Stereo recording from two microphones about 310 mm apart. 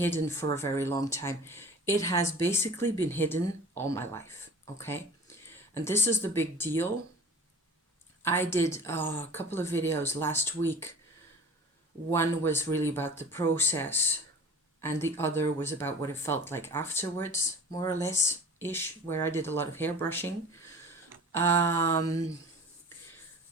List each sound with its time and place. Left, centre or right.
0.0 s speech: centre
8.2 s speech: centre
12.1 s speech: centre
21.3 s speech: centre